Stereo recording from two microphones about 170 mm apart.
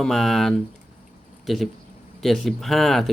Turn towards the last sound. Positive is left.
turn(degrees=0)  # may be behind; listen again after turning